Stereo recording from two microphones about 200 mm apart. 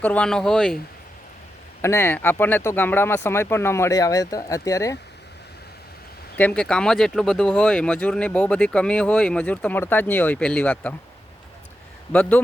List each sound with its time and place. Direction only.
0.0 s speech: 5° left (ahead or behind)
1.8 s speech: 10° left (ahead or behind)
6.3 s speech: 5° left (ahead or behind)
12.1 s speech: 10° left (ahead or behind)